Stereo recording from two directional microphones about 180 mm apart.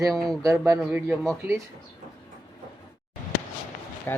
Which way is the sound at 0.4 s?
15° right (ahead or behind).